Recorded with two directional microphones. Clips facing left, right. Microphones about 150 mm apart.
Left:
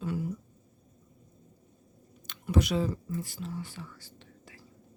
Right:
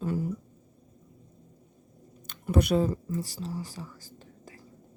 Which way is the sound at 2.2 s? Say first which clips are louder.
Right 3 dB; 50° right (ahead or behind).